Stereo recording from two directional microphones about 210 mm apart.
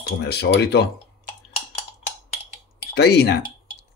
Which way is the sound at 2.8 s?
50° left (ahead or behind).